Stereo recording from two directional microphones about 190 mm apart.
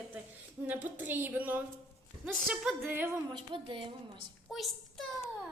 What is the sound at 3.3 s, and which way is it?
Speech, 25° right (ahead or behind).